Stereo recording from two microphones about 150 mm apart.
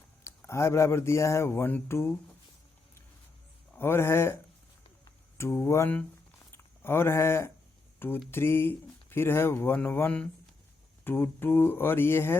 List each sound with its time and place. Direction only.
0.3 s speech: 20° left (ahead or behind)
3.8 s speech: 15° left (ahead or behind)
5.4 s speech: 20° left (ahead or behind)